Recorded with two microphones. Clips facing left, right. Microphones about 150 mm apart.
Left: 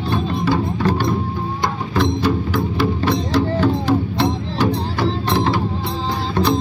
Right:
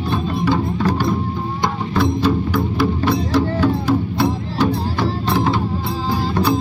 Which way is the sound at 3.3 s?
20° left (ahead or behind).